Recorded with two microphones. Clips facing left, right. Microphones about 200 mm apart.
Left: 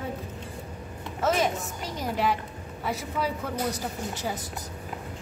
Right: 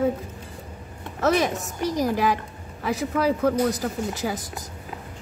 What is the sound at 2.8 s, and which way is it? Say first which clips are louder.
Speech: right 7 dB; 90° right.